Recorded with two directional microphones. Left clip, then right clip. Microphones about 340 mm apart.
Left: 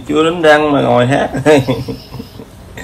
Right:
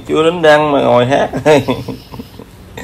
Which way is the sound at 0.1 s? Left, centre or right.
Right.